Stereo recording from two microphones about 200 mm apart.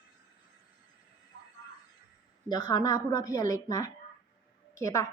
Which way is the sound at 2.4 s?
20° left (ahead or behind).